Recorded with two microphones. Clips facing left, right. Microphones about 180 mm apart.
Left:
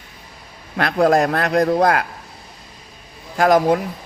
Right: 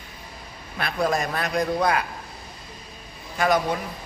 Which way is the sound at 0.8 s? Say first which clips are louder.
Left 9 dB; 85° left.